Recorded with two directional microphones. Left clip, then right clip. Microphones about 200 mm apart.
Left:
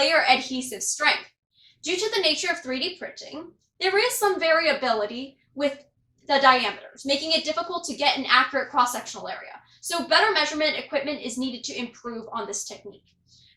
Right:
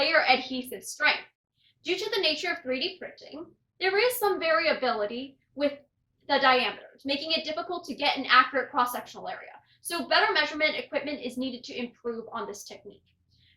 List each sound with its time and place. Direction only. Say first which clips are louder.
0.0 s a woman's voice: left 3 dB; centre (ahead or behind)